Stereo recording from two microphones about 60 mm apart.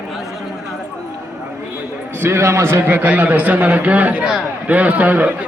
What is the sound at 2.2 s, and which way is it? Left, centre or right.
Speech, right.